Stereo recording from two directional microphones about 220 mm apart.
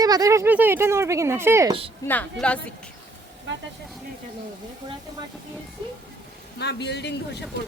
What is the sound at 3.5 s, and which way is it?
Speech, 55° right (ahead or behind).